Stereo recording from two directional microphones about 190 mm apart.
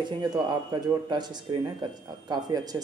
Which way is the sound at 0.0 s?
20° right (ahead or behind).